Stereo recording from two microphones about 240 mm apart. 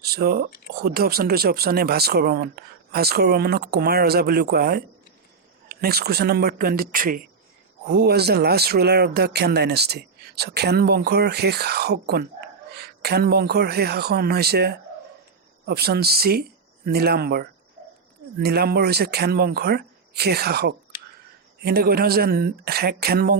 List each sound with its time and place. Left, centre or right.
0.0 s speech: right